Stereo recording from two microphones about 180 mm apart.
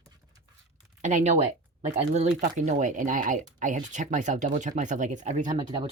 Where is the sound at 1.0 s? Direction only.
40° right (ahead or behind).